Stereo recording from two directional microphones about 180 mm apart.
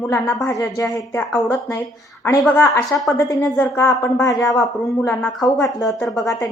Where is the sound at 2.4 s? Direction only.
5° left (ahead or behind).